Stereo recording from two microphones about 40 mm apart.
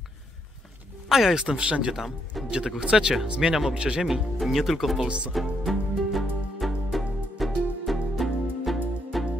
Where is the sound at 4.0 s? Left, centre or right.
Centre.